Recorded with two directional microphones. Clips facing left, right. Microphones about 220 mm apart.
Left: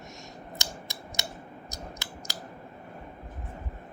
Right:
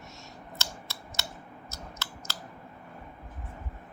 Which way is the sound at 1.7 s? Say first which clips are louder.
Left 1 dB; 15° left (ahead or behind).